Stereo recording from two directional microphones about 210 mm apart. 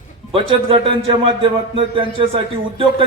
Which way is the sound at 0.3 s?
25° right (ahead or behind).